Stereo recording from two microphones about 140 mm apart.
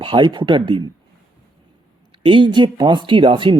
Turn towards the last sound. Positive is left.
turn(degrees=-40)  # may be behind; listen again after turning